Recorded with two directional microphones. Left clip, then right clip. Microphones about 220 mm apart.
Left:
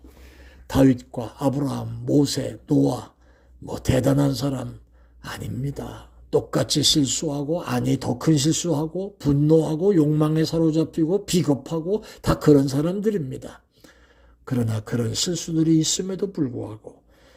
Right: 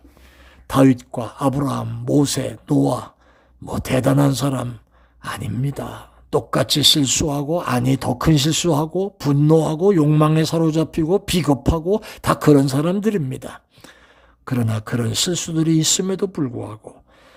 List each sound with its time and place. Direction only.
0.7 s speech: 20° right (ahead or behind)